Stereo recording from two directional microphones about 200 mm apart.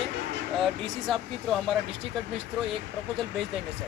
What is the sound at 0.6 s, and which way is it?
Speech, centre (ahead or behind).